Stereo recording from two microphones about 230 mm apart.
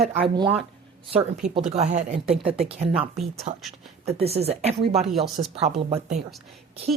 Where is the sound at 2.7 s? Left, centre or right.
Right.